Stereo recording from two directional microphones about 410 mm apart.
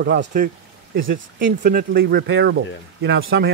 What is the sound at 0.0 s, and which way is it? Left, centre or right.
Speech, right.